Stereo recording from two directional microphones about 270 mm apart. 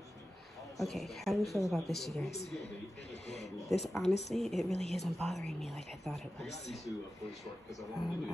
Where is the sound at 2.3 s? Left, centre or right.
Left.